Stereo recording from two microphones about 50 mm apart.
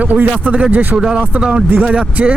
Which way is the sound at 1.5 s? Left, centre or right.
Right.